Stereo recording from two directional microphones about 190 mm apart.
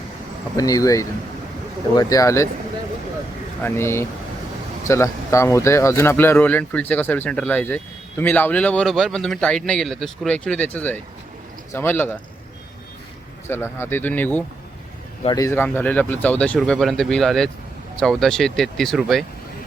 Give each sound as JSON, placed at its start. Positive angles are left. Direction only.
{"t": 0.5, "sound": "speech", "side_deg": 20}
{"t": 3.6, "sound": "speech", "side_deg": 10}
{"t": 13.5, "sound": "speech", "side_deg": 10}
{"t": 15.2, "sound": "speech", "side_deg": 25}
{"t": 15.4, "sound": "speech", "side_deg": 10}